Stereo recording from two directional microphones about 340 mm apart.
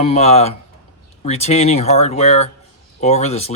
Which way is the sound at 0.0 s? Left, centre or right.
Centre.